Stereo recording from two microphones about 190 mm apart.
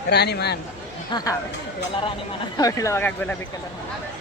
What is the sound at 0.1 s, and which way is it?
Speech, 60° left (ahead or behind).